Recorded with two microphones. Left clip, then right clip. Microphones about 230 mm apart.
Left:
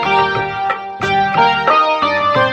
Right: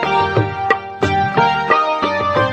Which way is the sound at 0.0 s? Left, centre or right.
Left.